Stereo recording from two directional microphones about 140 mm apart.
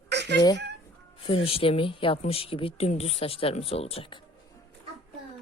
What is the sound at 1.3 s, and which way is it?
Speech, 40° left (ahead or behind).